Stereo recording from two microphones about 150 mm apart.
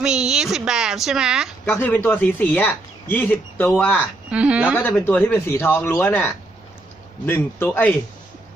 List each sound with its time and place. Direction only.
0.0 s speech: 5° right (ahead or behind)
1.6 s speech: 15° left (ahead or behind)
4.3 s speech: 5° right (ahead or behind)
4.8 s speech: 10° left (ahead or behind)